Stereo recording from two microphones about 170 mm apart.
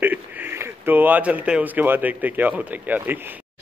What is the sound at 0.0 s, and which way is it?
Speech, 10° right (ahead or behind).